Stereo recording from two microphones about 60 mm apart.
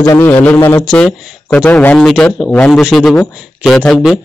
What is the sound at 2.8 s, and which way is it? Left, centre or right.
A man's voice, centre.